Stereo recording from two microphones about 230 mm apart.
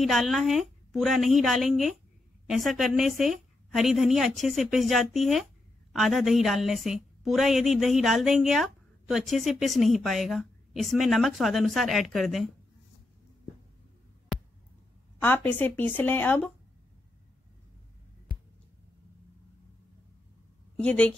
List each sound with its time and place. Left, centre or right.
0.0 s a woman's voice: centre
15.2 s speech: centre
18.3 s a sound: left
20.8 s a woman's voice: centre